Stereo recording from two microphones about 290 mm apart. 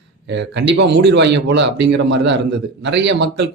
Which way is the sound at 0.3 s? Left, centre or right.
Right.